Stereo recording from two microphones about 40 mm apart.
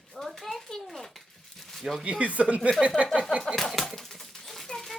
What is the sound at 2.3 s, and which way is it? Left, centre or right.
Speech, right.